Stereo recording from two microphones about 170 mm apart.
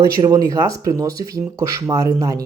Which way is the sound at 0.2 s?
20° right (ahead or behind).